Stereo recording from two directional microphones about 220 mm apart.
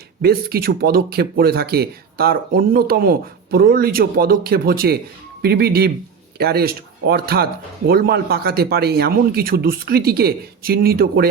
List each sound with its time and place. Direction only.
0.2 s speech: 45° right (ahead or behind)